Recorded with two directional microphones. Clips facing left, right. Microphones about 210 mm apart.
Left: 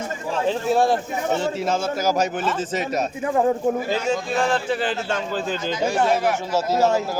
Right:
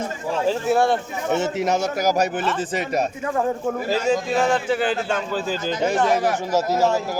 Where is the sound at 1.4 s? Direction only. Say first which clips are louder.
Right 2 dB; 15° right (ahead or behind).